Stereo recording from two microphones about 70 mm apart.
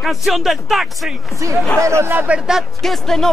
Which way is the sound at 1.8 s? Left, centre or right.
Right.